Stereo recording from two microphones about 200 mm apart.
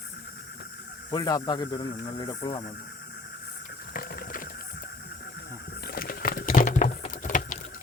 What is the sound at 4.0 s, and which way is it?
Ratchet, 45° left (ahead or behind).